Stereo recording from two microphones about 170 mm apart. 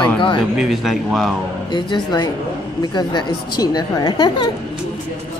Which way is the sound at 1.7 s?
25° left (ahead or behind).